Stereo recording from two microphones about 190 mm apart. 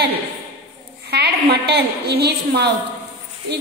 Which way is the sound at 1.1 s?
60° right (ahead or behind).